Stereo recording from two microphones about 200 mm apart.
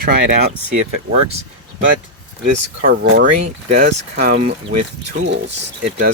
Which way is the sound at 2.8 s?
55° right (ahead or behind).